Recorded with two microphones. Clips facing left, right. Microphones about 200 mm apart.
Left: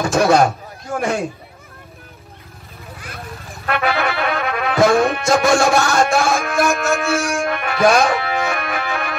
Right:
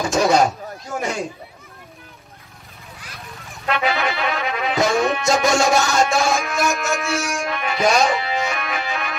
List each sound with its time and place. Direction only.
0.2 s speech: 60° left (ahead or behind)
3.6 s speech: 55° left (ahead or behind)
5.5 s music: 60° left (ahead or behind)